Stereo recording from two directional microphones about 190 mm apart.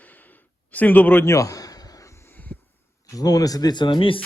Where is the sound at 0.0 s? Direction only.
10° left (ahead or behind).